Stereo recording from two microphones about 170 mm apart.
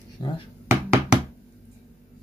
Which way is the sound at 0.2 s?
25° left (ahead or behind).